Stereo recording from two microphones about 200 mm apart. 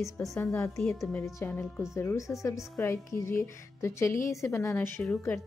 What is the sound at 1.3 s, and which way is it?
A woman's voice, 10° left (ahead or behind).